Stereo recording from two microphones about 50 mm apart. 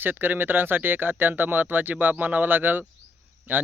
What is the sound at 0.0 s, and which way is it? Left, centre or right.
Speech, right.